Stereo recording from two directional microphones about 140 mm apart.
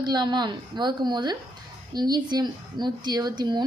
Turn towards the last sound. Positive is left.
turn(degrees=-30)  # may be behind; listen again after turning